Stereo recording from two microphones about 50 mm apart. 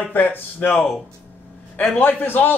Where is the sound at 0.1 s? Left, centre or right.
Left.